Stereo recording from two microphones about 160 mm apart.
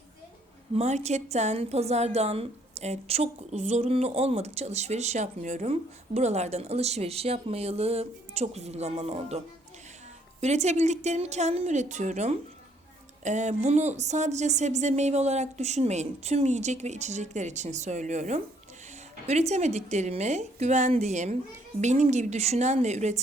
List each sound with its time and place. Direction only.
0.7 s a woman's voice: 45° right (ahead or behind)
10.4 s speech: 45° right (ahead or behind)